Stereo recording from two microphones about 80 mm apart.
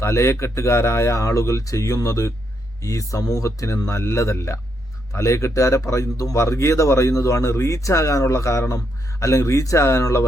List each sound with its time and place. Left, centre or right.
0.0 s speech: left